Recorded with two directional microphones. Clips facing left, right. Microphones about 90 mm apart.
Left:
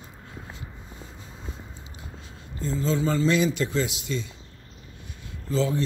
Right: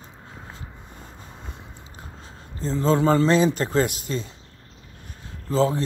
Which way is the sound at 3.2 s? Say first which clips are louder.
Right 3 dB; 35° right (ahead or behind).